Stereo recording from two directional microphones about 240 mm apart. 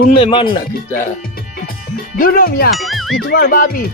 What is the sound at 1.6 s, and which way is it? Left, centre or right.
Speech, left.